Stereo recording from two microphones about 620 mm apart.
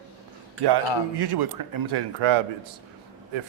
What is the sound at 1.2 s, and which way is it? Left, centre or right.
Speech, right.